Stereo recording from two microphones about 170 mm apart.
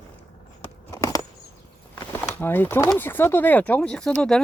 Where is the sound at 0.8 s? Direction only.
20° left (ahead or behind).